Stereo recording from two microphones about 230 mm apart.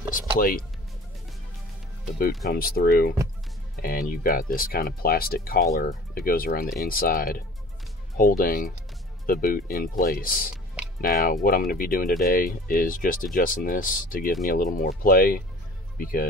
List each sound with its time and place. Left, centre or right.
0.1 s music: left
2.1 s speech: left